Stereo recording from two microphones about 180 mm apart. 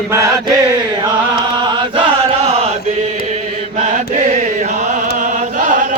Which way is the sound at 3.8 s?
40° right (ahead or behind).